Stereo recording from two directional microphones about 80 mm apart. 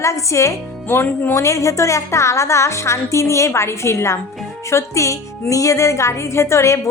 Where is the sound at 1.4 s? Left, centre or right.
Left.